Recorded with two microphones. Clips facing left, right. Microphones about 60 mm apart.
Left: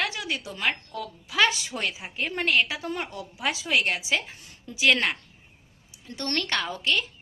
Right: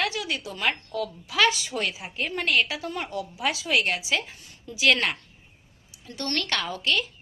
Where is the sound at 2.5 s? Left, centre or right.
Centre.